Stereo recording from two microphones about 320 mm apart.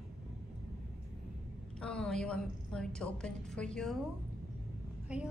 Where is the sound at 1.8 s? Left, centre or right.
Centre.